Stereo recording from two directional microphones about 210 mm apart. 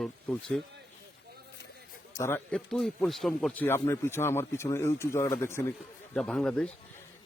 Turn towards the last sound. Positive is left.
turn(degrees=5)  # may be behind; listen again after turning